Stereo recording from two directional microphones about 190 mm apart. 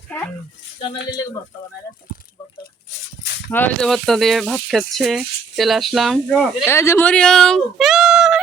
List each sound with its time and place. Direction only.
0.1 s a sound: 5° left (ahead or behind)
1.1 s speech: 20° left (ahead or behind)
3.5 s speech: 10° left (ahead or behind)
6.7 s speech: 15° left (ahead or behind); by 8.4 s 5° right (ahead or behind)